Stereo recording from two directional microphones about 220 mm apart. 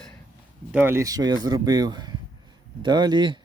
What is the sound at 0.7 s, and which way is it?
Speech, 10° right (ahead or behind).